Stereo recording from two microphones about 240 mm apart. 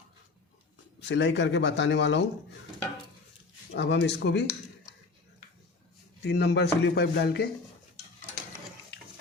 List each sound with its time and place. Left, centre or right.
0.9 s speech: left
3.8 s speech: left
6.2 s speech: left